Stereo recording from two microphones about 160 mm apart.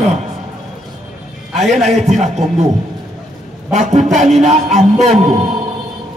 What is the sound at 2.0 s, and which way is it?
Music, 45° right (ahead or behind).